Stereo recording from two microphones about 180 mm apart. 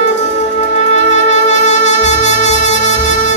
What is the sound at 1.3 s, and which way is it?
Music, 40° left (ahead or behind).